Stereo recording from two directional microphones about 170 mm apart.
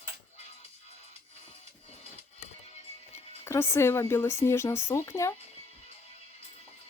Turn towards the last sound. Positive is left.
turn(degrees=15)  # may be behind; listen again after turning